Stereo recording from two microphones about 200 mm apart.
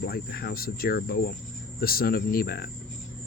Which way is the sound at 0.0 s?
50° left (ahead or behind).